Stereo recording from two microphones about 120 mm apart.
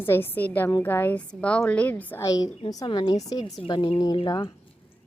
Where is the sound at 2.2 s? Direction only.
30° left (ahead or behind).